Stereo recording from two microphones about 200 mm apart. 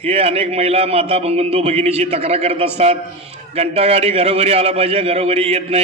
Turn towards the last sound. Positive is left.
turn(degrees=-30)  # may be behind; listen again after turning